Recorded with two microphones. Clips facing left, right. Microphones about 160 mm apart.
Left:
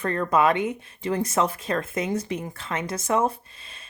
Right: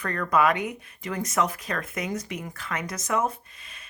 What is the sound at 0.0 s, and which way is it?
Speech, 25° left (ahead or behind).